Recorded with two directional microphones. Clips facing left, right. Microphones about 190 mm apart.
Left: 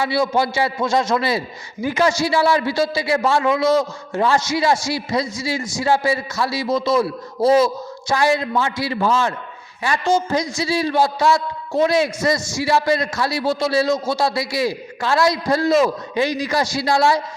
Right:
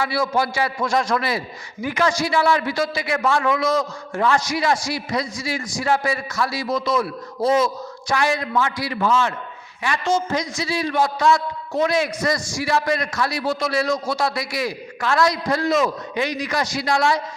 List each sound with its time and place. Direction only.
0.0 s a man's voice: 25° left (ahead or behind)